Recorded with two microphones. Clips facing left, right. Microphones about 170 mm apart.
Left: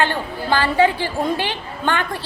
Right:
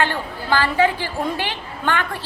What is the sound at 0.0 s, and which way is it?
A woman's voice, 20° left (ahead or behind).